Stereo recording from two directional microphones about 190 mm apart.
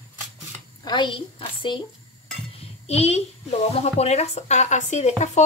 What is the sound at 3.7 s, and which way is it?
Speech, 35° left (ahead or behind).